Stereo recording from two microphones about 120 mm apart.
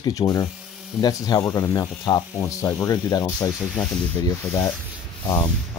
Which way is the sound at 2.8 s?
30° left (ahead or behind).